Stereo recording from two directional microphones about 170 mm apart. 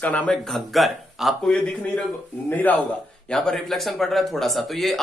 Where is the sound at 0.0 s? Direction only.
10° left (ahead or behind).